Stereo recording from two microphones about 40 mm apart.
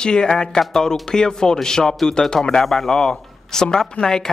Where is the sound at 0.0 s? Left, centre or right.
Left.